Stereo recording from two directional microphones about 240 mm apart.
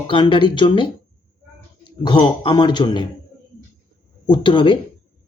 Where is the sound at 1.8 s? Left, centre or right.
Centre.